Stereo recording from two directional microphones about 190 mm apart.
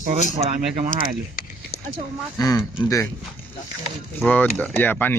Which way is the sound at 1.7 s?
55° left (ahead or behind).